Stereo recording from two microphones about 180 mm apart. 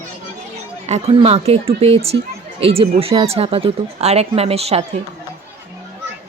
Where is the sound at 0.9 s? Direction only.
35° right (ahead or behind).